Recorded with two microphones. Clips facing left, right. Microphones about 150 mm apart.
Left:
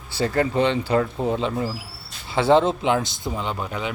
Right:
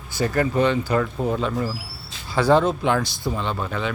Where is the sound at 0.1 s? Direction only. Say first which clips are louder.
Even; 25° left (ahead or behind).